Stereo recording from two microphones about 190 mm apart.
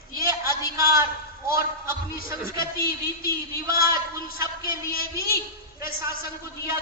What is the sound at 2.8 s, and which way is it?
Speech, 50° left (ahead or behind).